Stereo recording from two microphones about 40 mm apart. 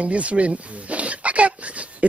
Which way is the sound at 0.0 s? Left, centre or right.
Right.